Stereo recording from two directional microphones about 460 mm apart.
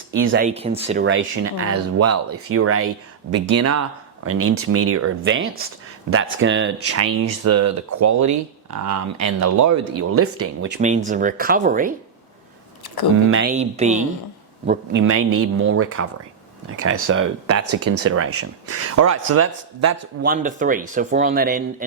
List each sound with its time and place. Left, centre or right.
0.2 s speech: right
10.8 s speech: centre
13.3 s speech: centre
14.7 s speech: right
20.2 s speech: centre